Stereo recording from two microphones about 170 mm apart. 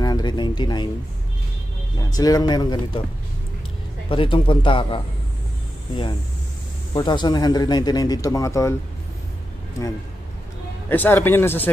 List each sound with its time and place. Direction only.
0.0 s speech: 25° left (ahead or behind)
2.0 s speech: 20° left (ahead or behind)
4.1 s speech: 30° left (ahead or behind)
6.9 s speech: 25° left (ahead or behind)
10.9 s a man's voice: 10° left (ahead or behind)